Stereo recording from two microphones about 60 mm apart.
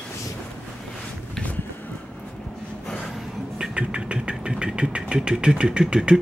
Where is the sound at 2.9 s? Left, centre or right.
Centre.